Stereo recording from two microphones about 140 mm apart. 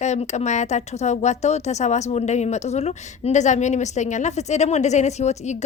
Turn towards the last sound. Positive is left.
turn(degrees=55)  # may be behind; listen again after turning